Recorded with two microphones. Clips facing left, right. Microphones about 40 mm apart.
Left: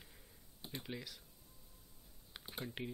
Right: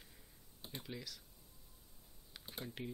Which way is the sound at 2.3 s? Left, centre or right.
Centre.